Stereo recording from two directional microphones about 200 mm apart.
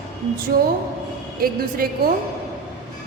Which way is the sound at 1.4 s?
45° right (ahead or behind).